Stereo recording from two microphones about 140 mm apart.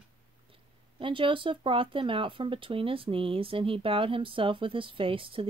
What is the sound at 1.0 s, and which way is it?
Speech, 40° right (ahead or behind).